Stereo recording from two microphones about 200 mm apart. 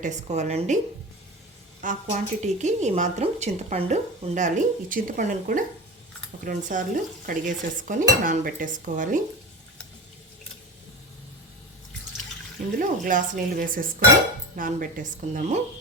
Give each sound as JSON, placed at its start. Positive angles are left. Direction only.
{"t": 0.0, "sound": "speech", "side_deg": -35}
{"t": 1.8, "sound": "speech", "side_deg": -40}
{"t": 12.8, "sound": "speech", "side_deg": -40}